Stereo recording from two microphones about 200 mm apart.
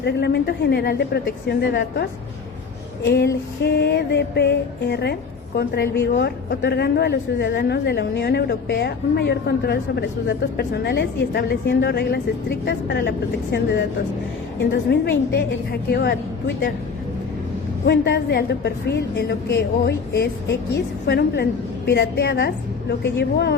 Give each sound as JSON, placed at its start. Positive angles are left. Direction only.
{"t": 0.0, "sound": "a woman's voice", "side_deg": 55}
{"t": 3.6, "sound": "a woman's voice", "side_deg": 55}
{"t": 17.8, "sound": "a woman's voice", "side_deg": 55}